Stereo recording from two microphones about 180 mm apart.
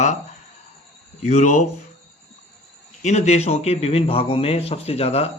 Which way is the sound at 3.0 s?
40° left (ahead or behind).